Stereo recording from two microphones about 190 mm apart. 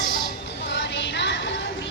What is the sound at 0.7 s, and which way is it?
Music, 70° left (ahead or behind).